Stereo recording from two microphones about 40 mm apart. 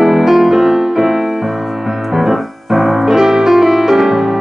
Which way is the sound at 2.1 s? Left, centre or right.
Centre.